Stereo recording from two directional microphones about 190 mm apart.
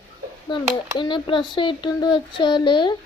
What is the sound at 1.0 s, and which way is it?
Speech, 25° left (ahead or behind).